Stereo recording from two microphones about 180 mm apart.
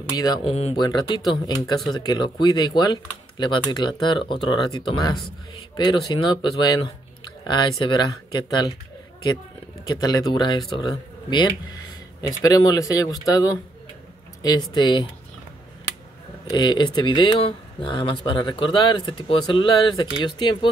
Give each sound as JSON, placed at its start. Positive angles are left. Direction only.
{"t": 0.1, "sound": "speech", "side_deg": 20}
{"t": 0.4, "sound": "speech", "side_deg": 35}
{"t": 0.7, "sound": "speech", "side_deg": 20}
{"t": 9.8, "sound": "speech", "side_deg": 20}
{"t": 16.4, "sound": "speech", "side_deg": 25}